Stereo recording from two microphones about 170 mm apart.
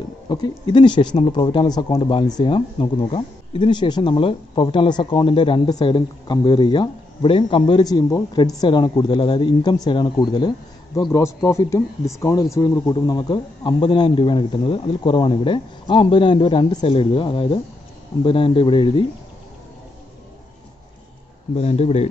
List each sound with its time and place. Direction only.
0.3 s speech: 25° left (ahead or behind)
21.5 s speech: 40° left (ahead or behind)